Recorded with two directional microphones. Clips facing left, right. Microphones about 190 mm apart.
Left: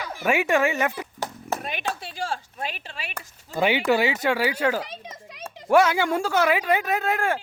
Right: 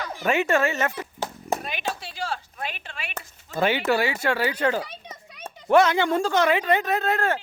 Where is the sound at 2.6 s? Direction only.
35° left (ahead or behind).